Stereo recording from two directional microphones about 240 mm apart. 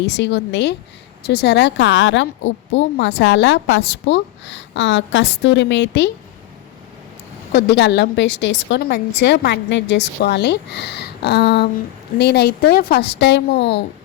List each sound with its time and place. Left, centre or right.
0.0 s speech: left
7.5 s speech: left